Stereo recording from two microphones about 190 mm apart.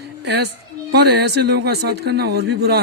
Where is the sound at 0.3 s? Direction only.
60° right (ahead or behind).